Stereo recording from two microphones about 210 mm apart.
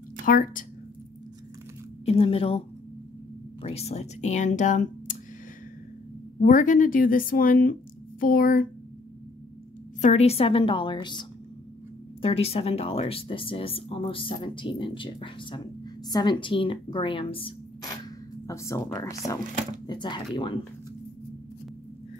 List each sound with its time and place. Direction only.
0.2 s speech: 40° left (ahead or behind)
2.0 s speech: 30° left (ahead or behind)
3.6 s speech: 30° left (ahead or behind)
6.4 s speech: 40° left (ahead or behind)
10.0 s speech: 30° left (ahead or behind)
18.5 s speech: 15° left (ahead or behind)